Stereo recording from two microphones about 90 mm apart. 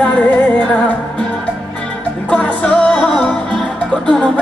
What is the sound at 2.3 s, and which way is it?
Music, 15° left (ahead or behind).